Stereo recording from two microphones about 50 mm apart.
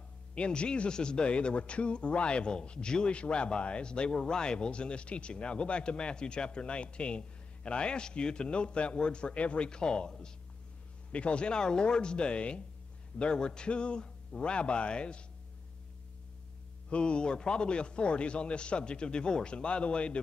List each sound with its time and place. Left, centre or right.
0.3 s a man's voice: left
16.9 s a man's voice: left